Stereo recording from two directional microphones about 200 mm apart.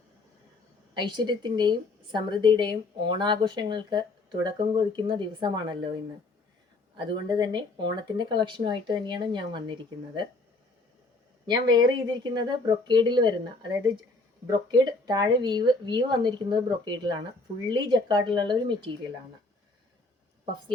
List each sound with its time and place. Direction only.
0.9 s speech: 25° right (ahead or behind)
6.9 s speech: 20° right (ahead or behind)
11.4 s speech: 20° right (ahead or behind)